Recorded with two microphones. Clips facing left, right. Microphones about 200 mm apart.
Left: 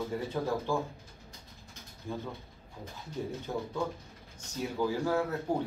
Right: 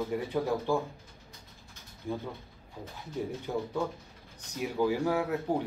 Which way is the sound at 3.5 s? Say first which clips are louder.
Right 3 dB; 10° right (ahead or behind).